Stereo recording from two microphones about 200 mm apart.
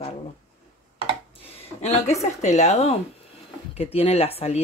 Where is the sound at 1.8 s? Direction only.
35° left (ahead or behind).